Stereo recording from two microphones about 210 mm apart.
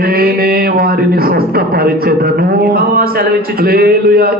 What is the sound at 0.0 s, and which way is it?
Speech, 45° right (ahead or behind).